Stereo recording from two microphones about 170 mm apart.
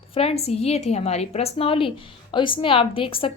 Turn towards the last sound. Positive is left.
turn(degrees=30)  # may be behind; listen again after turning